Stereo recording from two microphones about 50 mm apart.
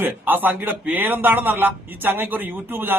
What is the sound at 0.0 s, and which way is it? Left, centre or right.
A man's voice, right.